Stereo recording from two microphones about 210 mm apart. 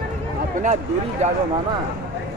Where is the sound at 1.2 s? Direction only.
30° right (ahead or behind).